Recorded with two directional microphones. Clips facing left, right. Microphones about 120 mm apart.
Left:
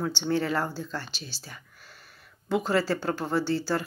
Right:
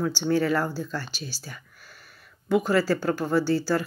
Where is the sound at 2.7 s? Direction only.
25° left (ahead or behind).